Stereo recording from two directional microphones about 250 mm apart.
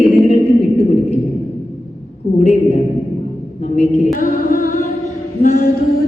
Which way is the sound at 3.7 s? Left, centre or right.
Left.